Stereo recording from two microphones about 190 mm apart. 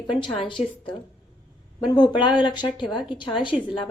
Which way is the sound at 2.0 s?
25° left (ahead or behind).